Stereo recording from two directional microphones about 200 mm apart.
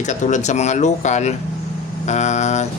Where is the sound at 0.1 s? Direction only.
35° left (ahead or behind).